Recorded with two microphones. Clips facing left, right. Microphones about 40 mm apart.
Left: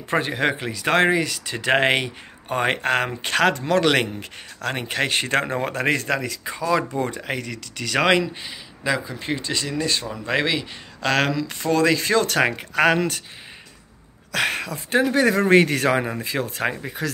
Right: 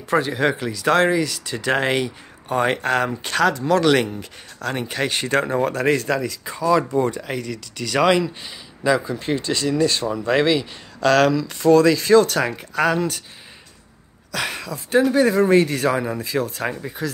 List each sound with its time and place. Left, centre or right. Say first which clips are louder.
0.1 s speech: right 2 dB; left
5.6 s speech: right 3 dB; left
8.5 s speech: right 5 dB; centre
11.7 s speech: right 5 dB; left
12.3 s speech: left 2 dB; left
14.3 s speech: left 3 dB; left
15.1 s speech: left 1 dB; left
16.1 s speech: right 3 dB; left